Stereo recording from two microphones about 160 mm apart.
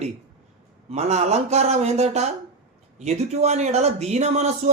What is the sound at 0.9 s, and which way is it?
A man's voice, 45° right (ahead or behind).